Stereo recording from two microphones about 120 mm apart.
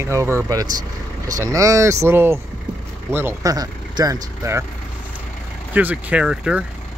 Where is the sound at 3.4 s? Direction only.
30° right (ahead or behind).